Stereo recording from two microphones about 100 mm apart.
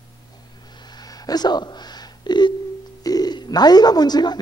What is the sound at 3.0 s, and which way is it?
Speech, 40° left (ahead or behind).